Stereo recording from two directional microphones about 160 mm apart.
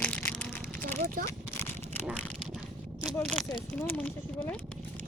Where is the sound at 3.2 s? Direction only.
Centre (ahead or behind).